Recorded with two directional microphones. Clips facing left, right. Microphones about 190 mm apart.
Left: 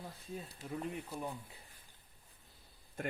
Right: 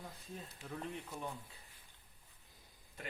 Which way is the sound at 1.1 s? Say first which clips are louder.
Left 3 dB; 35° left (ahead or behind).